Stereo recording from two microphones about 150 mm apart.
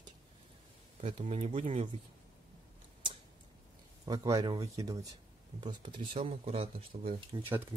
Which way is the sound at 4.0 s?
25° right (ahead or behind).